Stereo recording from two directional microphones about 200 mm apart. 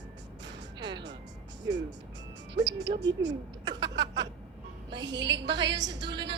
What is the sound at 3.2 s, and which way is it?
Laughter, 60° right (ahead or behind).